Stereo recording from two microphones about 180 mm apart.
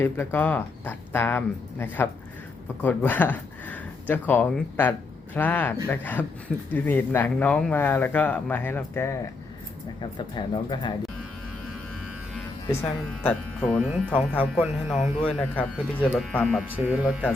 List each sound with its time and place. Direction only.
0.0 s speech: 15° left (ahead or behind)
10.0 s speech: 25° left (ahead or behind)
12.6 s speech: 10° left (ahead or behind)